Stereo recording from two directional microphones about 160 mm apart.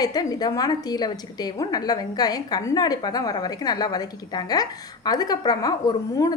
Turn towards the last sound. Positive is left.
turn(degrees=25)  # may be behind; listen again after turning